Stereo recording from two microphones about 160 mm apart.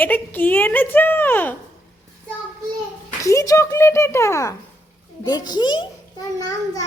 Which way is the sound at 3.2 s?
20° left (ahead or behind).